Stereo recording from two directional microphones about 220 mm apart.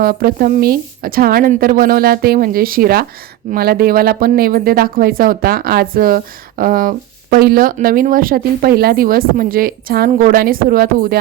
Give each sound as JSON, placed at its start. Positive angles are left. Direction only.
{"t": 0.0, "sound": "speech", "side_deg": -40}